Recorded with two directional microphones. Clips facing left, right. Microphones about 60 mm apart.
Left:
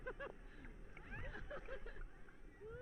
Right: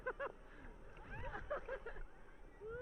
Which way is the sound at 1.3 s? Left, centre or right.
Right.